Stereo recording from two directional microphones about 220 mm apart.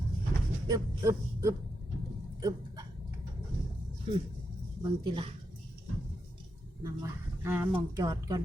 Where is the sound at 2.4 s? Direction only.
15° right (ahead or behind).